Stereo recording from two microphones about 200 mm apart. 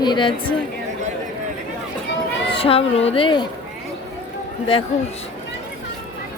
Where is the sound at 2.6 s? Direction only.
30° left (ahead or behind).